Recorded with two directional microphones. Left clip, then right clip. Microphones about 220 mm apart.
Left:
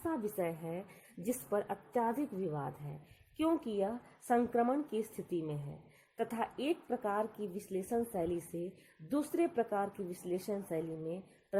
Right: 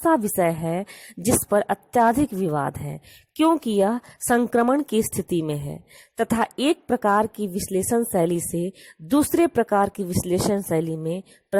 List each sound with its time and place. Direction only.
0.0 s a woman's voice: 45° right (ahead or behind)